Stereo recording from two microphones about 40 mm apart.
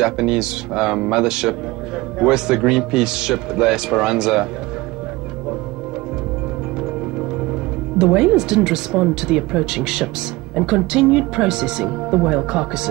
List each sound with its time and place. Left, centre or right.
0.0 s speech: centre
8.0 s speech: centre